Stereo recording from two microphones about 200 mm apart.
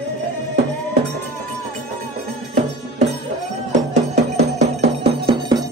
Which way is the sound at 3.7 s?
35° right (ahead or behind).